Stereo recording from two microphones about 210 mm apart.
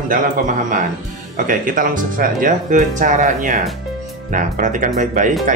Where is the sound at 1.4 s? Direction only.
40° right (ahead or behind).